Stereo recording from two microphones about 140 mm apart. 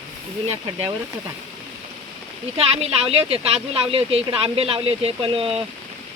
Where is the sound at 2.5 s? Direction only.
45° right (ahead or behind).